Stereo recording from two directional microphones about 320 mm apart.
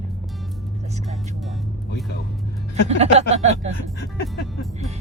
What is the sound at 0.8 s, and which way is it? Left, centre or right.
Music, right.